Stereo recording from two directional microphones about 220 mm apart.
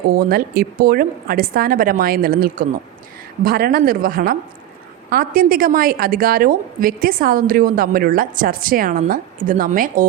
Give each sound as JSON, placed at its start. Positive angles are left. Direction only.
{"t": 0.1, "sound": "a woman's voice", "side_deg": -40}